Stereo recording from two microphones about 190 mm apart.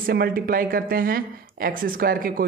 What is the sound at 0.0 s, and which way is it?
Speech, 50° right (ahead or behind).